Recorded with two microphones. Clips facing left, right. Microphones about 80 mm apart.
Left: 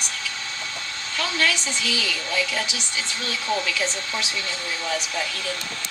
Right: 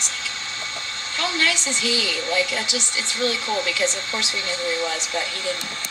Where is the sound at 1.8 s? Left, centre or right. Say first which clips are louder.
Right 5 dB; right.